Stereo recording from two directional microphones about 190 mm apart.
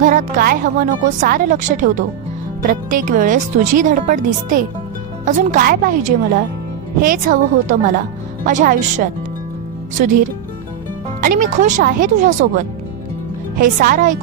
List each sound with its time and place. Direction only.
0.0 s a woman's voice: 45° right (ahead or behind)